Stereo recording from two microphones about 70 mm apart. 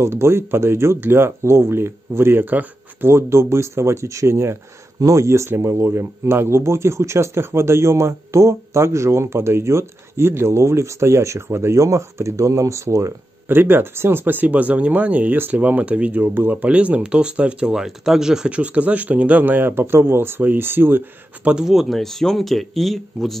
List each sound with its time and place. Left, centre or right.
0.0 s speech: right
13.6 s speech: right
21.5 s speech: centre